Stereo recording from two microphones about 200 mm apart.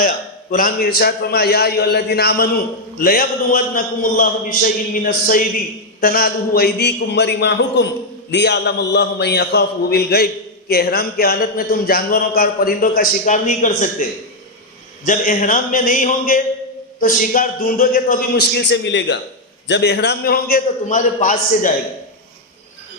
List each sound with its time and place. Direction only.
0.0 s a man's voice: 45° left (ahead or behind)